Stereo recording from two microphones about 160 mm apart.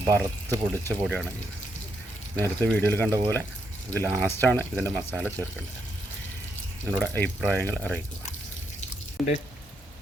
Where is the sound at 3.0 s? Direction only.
20° right (ahead or behind).